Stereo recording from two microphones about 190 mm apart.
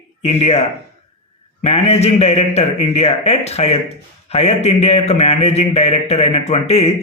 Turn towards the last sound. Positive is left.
turn(degrees=35)  # may be behind; listen again after turning